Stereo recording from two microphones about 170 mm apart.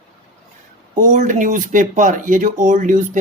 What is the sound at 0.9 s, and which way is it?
Speech, 50° right (ahead or behind).